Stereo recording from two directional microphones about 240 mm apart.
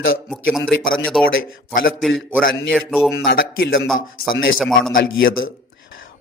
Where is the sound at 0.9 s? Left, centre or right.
Centre.